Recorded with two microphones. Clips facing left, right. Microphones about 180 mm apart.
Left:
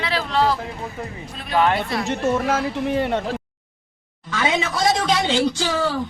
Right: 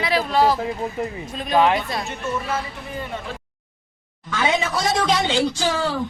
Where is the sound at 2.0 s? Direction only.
90° left; by 3.2 s 75° left (ahead or behind).